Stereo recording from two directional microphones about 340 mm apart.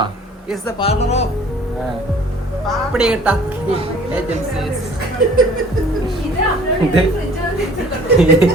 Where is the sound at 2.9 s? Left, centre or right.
Centre.